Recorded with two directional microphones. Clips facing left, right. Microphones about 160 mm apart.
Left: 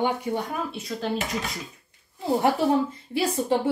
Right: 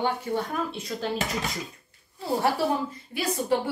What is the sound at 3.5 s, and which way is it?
Speech, 25° left (ahead or behind).